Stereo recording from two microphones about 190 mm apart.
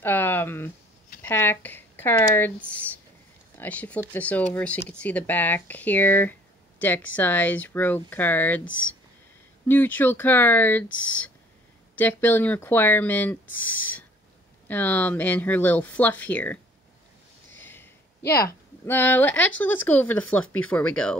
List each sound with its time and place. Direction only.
0.0 s a sound: 10° left (ahead or behind)
1.2 s speech: 10° left (ahead or behind)
8.6 s speech: 90° left
9.7 s speech: 10° left (ahead or behind)
17.6 s a sound: 10° left (ahead or behind)
18.9 s speech: 10° left (ahead or behind)